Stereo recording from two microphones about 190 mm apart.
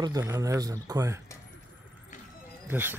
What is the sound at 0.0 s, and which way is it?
Speech, 20° right (ahead or behind).